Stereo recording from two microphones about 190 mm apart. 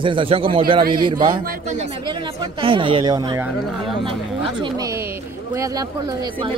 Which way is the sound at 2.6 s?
25° right (ahead or behind).